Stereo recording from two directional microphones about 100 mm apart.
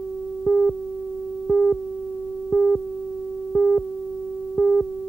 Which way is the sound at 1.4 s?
5° left (ahead or behind).